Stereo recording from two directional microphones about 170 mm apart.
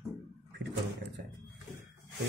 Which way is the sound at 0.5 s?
90° right.